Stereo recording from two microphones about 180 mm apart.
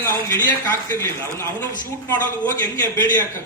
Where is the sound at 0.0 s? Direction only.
15° left (ahead or behind).